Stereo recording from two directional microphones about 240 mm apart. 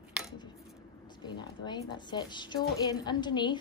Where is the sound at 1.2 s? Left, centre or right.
Centre.